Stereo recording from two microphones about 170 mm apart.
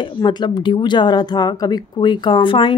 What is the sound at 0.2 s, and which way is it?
Speech, 25° left (ahead or behind).